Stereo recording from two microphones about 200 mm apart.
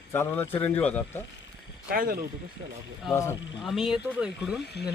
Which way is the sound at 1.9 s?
45° right (ahead or behind).